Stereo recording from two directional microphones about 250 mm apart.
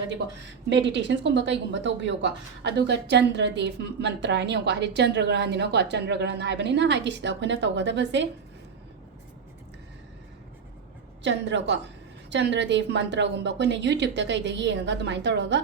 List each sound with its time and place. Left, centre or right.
0.7 s a woman's voice: right
11.2 s a woman's voice: right